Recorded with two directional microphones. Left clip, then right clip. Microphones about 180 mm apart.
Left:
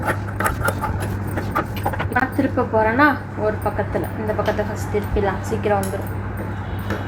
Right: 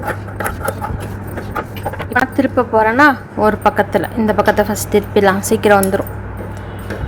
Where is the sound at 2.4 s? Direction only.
60° right (ahead or behind).